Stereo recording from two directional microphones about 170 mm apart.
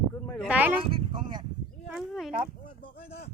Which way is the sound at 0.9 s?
30° right (ahead or behind).